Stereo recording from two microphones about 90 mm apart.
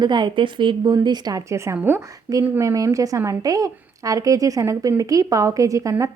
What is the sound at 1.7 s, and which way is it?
Speech, 20° right (ahead or behind).